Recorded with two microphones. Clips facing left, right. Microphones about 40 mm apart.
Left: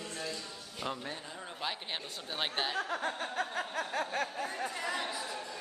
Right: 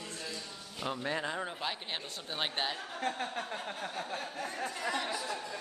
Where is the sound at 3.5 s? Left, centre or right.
Left.